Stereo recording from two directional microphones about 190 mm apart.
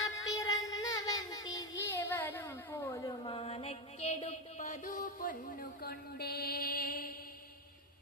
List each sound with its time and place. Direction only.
0.0 s music: 20° left (ahead or behind)
1.8 s a sound: 15° left (ahead or behind)
3.1 s music: 30° left (ahead or behind); by 7.1 s 50° left (ahead or behind)